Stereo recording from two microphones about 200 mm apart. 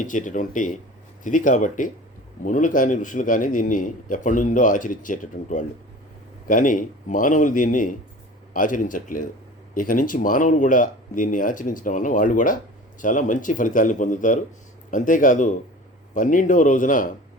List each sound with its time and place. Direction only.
0.0 s a man's voice: 40° left (ahead or behind)